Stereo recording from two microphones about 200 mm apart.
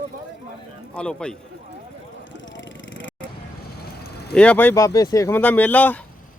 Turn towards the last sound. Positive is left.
turn(degrees=10)  # may be behind; listen again after turning